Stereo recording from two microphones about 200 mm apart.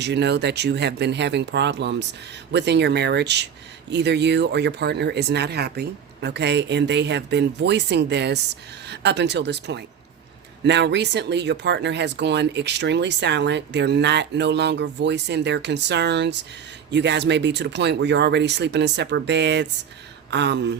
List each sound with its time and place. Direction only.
0.0 s speech: 60° right (ahead or behind)